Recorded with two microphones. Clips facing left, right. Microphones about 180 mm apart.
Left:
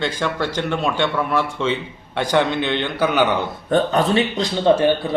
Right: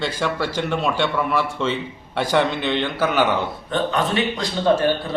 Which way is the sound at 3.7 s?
40° left (ahead or behind).